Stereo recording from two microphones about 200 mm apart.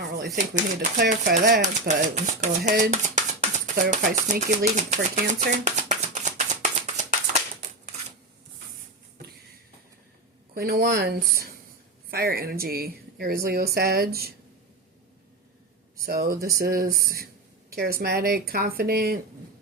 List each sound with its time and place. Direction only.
0.0 s typewriter: 55° right (ahead or behind)
0.3 s speech: 40° right (ahead or behind)
1.9 s speech: 35° right (ahead or behind)
5.6 s clapping: 35° right (ahead or behind)
10.5 s speech: 50° right (ahead or behind)
16.0 s speech: 50° right (ahead or behind)